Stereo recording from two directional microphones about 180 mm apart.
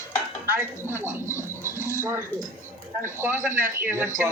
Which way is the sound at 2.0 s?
15° right (ahead or behind).